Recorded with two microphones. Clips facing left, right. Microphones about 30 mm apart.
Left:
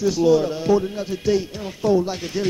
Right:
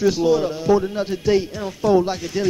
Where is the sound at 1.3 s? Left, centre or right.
Right.